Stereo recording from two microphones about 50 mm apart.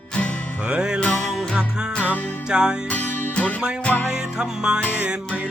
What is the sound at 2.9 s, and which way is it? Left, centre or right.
Music, left.